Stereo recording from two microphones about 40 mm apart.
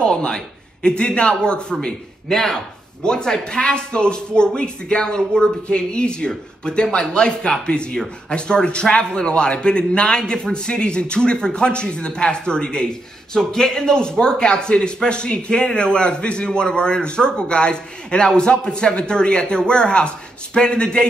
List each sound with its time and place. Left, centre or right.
0.0 s a sound: left
0.8 s speech: left
2.2 s speech: centre